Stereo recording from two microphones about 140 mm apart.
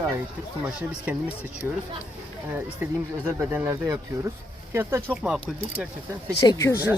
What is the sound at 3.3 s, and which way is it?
Speech, 15° right (ahead or behind).